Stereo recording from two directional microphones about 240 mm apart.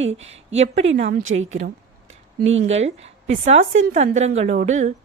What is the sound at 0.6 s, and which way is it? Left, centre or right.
Speech, right.